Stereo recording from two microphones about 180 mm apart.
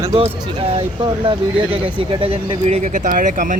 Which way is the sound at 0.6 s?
30° right (ahead or behind).